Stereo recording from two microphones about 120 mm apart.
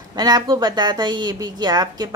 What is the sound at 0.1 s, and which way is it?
A woman's voice, 35° right (ahead or behind).